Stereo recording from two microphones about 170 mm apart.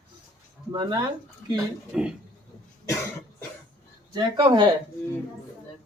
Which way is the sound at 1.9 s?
5° right (ahead or behind).